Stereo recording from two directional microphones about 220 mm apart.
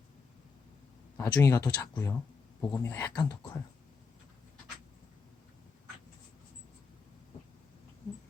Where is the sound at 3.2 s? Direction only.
20° left (ahead or behind).